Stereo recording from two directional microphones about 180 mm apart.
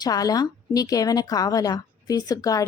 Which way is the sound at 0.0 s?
20° left (ahead or behind).